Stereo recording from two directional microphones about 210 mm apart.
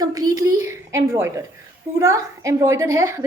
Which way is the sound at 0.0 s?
15° right (ahead or behind).